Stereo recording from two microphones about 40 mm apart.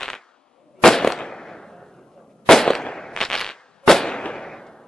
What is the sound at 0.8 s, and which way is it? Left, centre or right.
Firecracker, centre.